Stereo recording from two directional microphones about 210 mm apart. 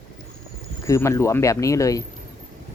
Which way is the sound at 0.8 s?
15° left (ahead or behind).